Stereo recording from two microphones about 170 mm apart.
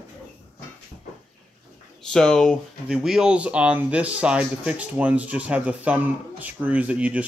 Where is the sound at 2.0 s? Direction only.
5° left (ahead or behind).